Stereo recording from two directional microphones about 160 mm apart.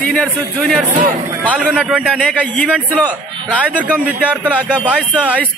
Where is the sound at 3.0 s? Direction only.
10° right (ahead or behind).